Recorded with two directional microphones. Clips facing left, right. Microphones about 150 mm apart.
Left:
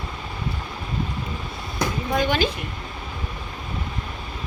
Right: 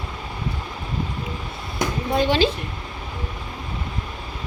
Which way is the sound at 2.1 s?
30° right (ahead or behind).